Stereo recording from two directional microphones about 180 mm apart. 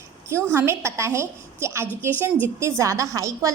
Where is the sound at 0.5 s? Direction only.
15° right (ahead or behind).